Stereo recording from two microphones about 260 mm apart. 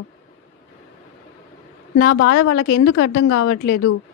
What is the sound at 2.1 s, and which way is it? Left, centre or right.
A woman's voice, left.